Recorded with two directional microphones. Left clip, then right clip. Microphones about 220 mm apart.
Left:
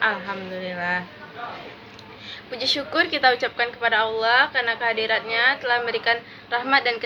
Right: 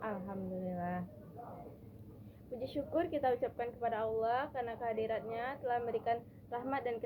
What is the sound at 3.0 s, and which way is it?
A woman's voice, 15° left (ahead or behind).